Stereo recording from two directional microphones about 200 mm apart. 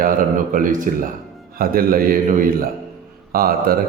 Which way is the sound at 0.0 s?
45° right (ahead or behind).